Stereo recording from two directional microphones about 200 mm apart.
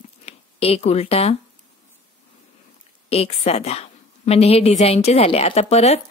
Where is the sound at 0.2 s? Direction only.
30° left (ahead or behind).